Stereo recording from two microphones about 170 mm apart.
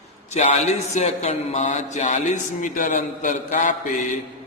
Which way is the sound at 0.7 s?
40° left (ahead or behind).